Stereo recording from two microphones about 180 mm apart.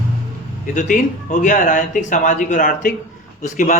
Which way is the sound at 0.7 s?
45° left (ahead or behind).